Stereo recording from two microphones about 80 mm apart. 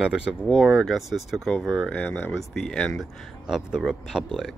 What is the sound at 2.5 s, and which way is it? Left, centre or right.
Speech, centre.